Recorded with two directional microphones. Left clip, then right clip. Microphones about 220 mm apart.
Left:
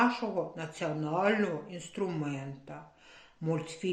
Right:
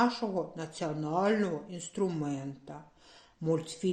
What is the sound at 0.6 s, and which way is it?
Speech, 45° right (ahead or behind).